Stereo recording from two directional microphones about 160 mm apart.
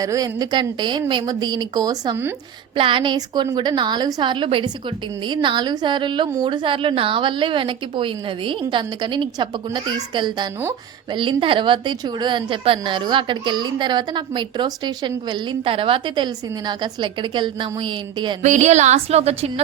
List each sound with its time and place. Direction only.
0.0 s a woman's voice: 20° right (ahead or behind)
2.7 s a woman's voice: 30° right (ahead or behind)
18.4 s a woman's voice: 45° right (ahead or behind)